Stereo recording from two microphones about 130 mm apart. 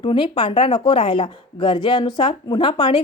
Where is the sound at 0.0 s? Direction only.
40° left (ahead or behind).